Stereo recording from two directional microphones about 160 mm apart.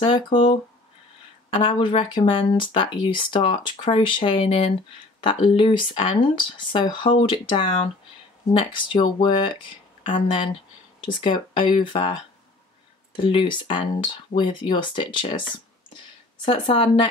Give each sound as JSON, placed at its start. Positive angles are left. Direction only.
{"t": 0.0, "sound": "speech", "side_deg": 30}
{"t": 1.6, "sound": "speech", "side_deg": 30}
{"t": 13.2, "sound": "speech", "side_deg": 30}
{"t": 16.4, "sound": "speech", "side_deg": 30}